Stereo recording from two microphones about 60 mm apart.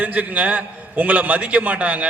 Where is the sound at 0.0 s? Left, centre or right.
Right.